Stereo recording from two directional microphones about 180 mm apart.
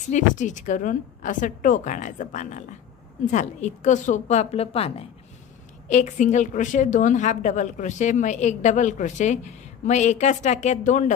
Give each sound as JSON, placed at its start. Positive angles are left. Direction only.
{"t": 0.1, "sound": "a woman's voice", "side_deg": 45}